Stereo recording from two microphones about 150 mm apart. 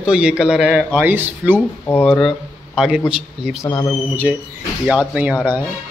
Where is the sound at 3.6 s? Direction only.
25° left (ahead or behind).